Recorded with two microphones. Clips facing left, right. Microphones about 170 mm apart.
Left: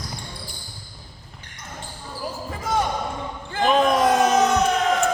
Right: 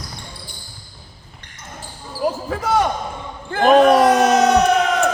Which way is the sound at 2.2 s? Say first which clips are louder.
Right 10 dB; 75° right (ahead or behind).